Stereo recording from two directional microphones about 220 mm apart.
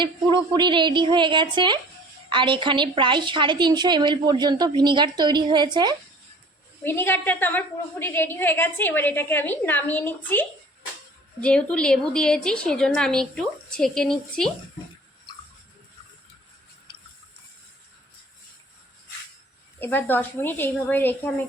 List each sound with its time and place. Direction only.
0.0 s a woman's voice: 20° right (ahead or behind)
6.8 s a woman's voice: 10° left (ahead or behind)
19.8 s a woman's voice: 10° left (ahead or behind)